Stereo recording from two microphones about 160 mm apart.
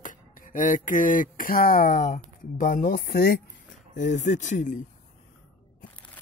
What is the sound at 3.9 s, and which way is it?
Speech, 50° left (ahead or behind).